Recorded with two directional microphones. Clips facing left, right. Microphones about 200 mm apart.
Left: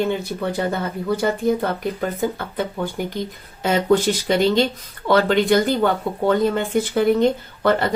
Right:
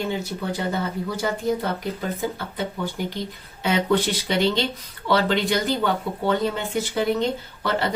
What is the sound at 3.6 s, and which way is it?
Speech, 45° left (ahead or behind).